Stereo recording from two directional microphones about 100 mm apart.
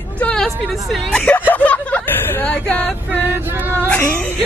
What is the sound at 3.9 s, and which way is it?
Speech, 15° left (ahead or behind).